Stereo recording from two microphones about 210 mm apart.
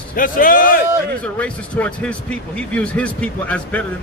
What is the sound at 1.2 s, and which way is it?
Speech, 5° left (ahead or behind).